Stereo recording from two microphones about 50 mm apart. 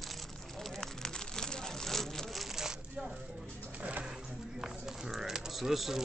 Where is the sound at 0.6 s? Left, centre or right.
Centre.